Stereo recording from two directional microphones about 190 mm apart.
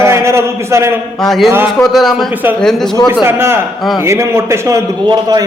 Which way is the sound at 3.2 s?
15° right (ahead or behind).